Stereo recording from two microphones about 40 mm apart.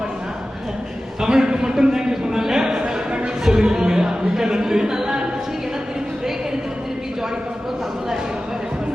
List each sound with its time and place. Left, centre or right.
1.2 s a man's voice: centre